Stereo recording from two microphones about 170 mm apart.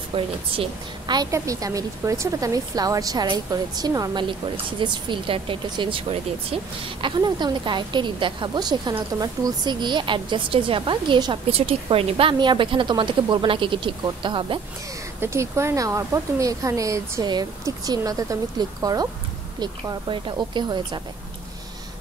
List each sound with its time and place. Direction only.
0.1 s a woman's voice: 30° right (ahead or behind)
15.1 s a woman's voice: 15° right (ahead or behind)